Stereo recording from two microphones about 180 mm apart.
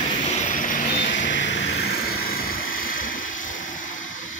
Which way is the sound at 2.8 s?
50° left (ahead or behind).